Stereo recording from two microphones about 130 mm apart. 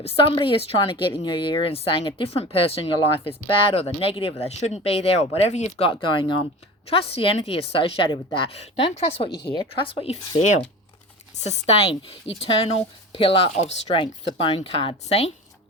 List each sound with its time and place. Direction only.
0.0 s a woman's voice: 45° left (ahead or behind)
5.9 s a woman's voice: 40° left (ahead or behind)
8.5 s a woman's voice: 50° left (ahead or behind)
11.4 s a woman's voice: 60° left (ahead or behind)
14.0 s a woman's voice: 45° left (ahead or behind)